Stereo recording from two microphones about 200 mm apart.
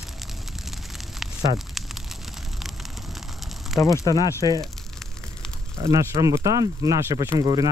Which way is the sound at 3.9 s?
20° left (ahead or behind).